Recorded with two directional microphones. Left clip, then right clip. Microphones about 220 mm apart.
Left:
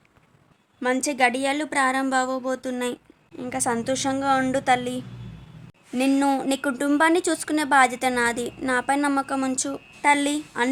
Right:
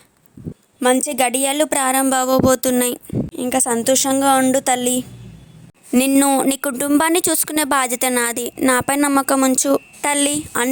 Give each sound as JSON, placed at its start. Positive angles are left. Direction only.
{"t": 1.0, "sound": "speech", "side_deg": -40}